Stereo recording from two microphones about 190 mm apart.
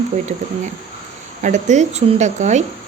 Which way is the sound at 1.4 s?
40° right (ahead or behind).